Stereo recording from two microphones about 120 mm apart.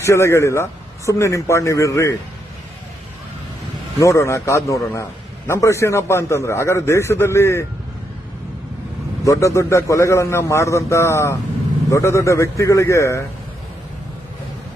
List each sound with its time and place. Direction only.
0.0 s speech: 25° left (ahead or behind)
4.0 s speech: 25° left (ahead or behind)
9.2 s speech: 25° left (ahead or behind)